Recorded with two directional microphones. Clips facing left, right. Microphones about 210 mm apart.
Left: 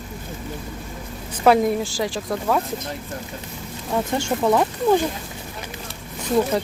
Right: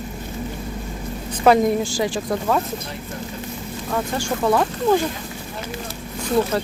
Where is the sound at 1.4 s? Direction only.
5° left (ahead or behind).